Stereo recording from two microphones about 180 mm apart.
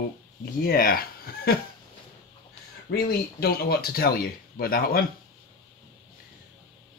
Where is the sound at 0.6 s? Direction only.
55° left (ahead or behind).